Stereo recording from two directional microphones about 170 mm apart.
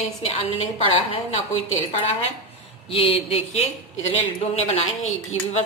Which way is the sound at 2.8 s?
35° left (ahead or behind).